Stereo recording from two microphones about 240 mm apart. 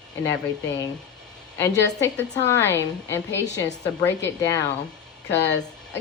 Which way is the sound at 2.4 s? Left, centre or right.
Centre.